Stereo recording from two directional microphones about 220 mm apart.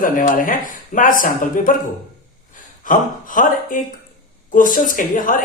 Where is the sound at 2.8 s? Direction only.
35° left (ahead or behind).